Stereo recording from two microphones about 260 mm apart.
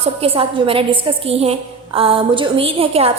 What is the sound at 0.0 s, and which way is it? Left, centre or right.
A woman's voice, right.